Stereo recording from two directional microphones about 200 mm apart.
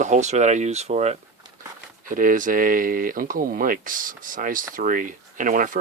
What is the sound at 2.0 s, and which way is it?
Speech, 45° right (ahead or behind).